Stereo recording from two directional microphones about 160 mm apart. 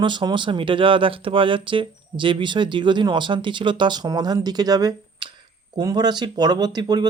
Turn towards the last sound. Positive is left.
turn(degrees=-25)  # may be behind; listen again after turning